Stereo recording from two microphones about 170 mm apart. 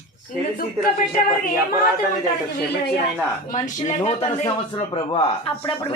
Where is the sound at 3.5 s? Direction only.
45° left (ahead or behind).